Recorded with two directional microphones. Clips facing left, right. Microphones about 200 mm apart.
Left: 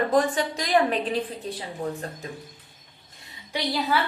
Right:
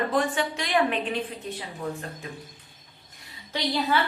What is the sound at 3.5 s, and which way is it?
Speech, 5° left (ahead or behind).